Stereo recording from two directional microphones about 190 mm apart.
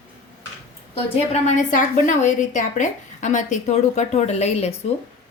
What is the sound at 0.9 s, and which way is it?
A woman's voice, 35° left (ahead or behind).